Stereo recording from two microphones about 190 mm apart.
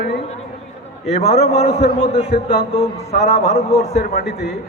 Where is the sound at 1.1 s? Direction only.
35° left (ahead or behind).